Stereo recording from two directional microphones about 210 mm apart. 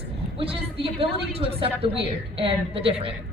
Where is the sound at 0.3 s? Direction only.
25° right (ahead or behind).